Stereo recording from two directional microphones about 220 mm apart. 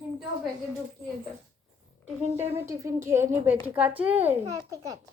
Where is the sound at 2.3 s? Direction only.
25° right (ahead or behind).